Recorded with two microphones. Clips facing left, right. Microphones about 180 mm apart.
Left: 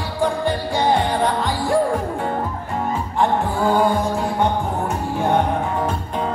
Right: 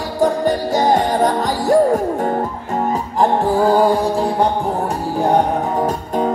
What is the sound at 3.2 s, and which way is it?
Music, 35° right (ahead or behind).